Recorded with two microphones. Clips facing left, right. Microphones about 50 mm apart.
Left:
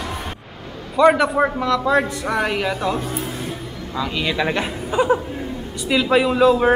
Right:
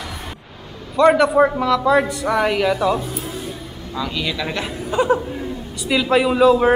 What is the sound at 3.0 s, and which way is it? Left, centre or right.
Speech, left.